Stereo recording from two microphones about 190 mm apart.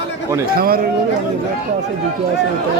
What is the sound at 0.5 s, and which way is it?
Speech, 50° right (ahead or behind).